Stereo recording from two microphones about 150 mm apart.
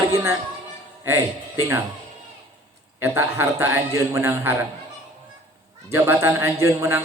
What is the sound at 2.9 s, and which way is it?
A man's voice, 15° right (ahead or behind).